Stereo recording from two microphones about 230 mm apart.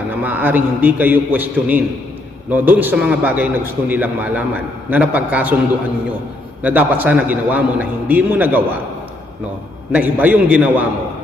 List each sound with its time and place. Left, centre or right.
0.1 s a man's voice: centre
6.6 s a man's voice: centre
9.9 s a man's voice: centre